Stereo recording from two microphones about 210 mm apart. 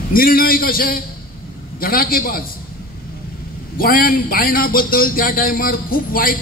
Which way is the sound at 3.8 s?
45° left (ahead or behind).